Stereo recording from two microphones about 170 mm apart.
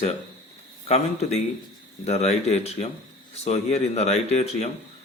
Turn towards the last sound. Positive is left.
turn(degrees=40)  # may be behind; listen again after turning